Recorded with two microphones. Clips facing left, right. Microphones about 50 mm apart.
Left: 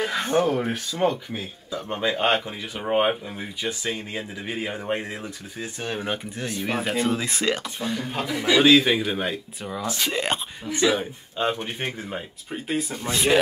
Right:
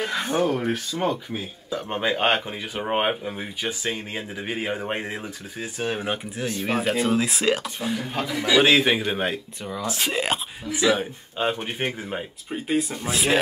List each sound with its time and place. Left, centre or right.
0.0 s speech: centre
1.9 s speech: right
8.6 s speech: right
9.6 s speech: centre
9.8 s speech: centre
10.1 s speech: centre